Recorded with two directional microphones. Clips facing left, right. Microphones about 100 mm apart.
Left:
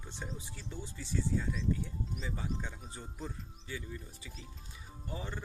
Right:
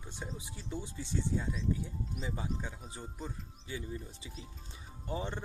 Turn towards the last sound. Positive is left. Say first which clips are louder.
# right 4 dB
turn(degrees=-20)  # may be behind; listen again after turning